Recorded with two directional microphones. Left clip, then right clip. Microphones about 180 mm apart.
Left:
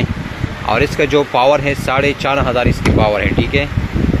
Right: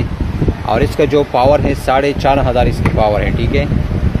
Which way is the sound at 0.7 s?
10° right (ahead or behind).